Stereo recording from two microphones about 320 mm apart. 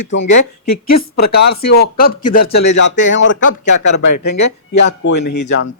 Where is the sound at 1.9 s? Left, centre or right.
Left.